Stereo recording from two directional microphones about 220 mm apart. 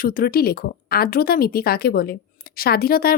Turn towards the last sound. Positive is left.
turn(degrees=40)  # may be behind; listen again after turning